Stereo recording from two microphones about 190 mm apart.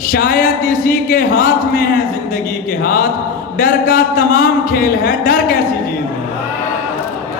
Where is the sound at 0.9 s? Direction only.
45° left (ahead or behind).